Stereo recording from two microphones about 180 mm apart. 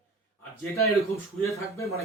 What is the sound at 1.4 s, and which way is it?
Speech, 15° left (ahead or behind).